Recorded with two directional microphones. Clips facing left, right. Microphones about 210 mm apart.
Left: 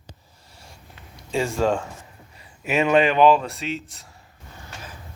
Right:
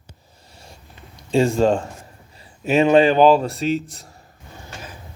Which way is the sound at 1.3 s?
30° right (ahead or behind).